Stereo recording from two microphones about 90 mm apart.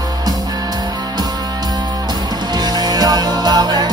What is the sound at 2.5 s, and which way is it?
Music, 50° right (ahead or behind).